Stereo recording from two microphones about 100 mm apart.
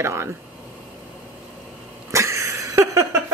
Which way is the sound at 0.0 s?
25° right (ahead or behind).